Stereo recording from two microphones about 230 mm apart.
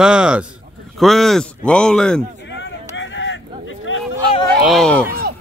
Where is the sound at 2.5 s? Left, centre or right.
Left.